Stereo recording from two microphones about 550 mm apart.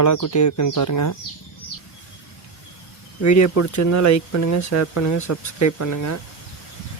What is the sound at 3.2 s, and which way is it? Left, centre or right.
Speech, left.